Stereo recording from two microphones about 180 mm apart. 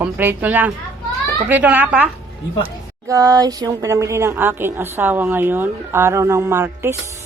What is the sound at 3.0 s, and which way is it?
A woman's voice, 20° right (ahead or behind).